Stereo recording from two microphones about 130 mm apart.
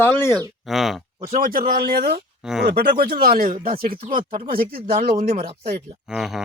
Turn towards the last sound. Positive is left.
turn(degrees=-5)  # may be behind; listen again after turning